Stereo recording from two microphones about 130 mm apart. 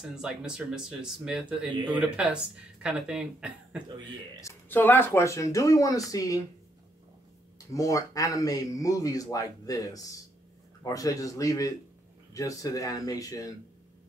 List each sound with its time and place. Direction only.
0.1 s speech: 5° right (ahead or behind)
1.7 s speech: 40° right (ahead or behind)
2.0 s speech: 10° right (ahead or behind)
4.4 s speech: 20° left (ahead or behind)
7.5 s speech: 25° left (ahead or behind)